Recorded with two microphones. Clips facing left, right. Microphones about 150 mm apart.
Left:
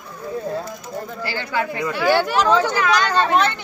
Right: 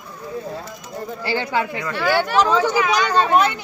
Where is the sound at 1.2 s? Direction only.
20° right (ahead or behind).